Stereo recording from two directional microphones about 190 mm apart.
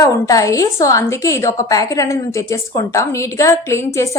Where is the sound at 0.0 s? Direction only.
15° left (ahead or behind).